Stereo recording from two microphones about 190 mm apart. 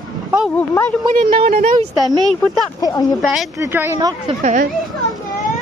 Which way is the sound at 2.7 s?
20° left (ahead or behind).